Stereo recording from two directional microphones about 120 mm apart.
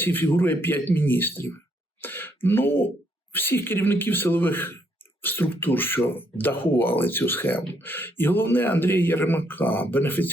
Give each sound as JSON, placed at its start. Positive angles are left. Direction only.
{"t": 0.0, "sound": "a man's voice", "side_deg": 15}
{"t": 2.0, "sound": "throat clearing", "side_deg": 15}
{"t": 3.3, "sound": "speech", "side_deg": 20}